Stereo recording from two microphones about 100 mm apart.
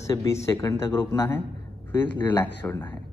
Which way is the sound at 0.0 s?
30° left (ahead or behind).